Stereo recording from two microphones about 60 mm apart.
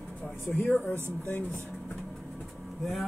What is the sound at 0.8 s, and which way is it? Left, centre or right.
Speech, left.